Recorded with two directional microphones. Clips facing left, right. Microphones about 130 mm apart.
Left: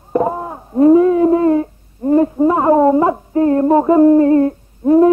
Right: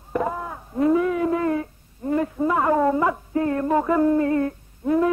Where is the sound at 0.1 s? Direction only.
30° left (ahead or behind).